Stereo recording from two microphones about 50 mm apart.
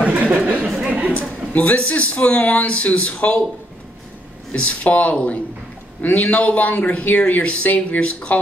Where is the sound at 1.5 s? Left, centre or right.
Left.